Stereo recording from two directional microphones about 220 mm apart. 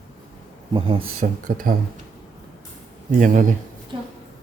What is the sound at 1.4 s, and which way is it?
Speech, 40° right (ahead or behind).